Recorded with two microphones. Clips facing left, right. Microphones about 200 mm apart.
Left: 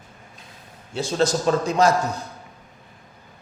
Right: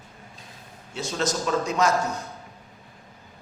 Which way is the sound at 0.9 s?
30° left (ahead or behind).